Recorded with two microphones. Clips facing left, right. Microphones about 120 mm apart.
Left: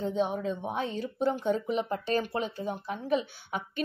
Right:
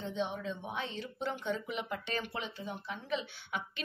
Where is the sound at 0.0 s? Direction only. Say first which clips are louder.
Left 7 dB; 40° left (ahead or behind).